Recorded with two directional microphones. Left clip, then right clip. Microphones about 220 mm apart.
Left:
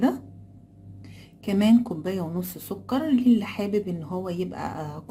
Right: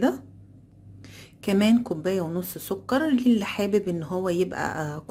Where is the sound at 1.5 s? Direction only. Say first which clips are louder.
Even; 25° right (ahead or behind).